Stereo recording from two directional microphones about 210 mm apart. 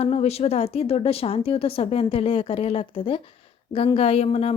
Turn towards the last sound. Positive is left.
turn(degrees=30)  # may be behind; listen again after turning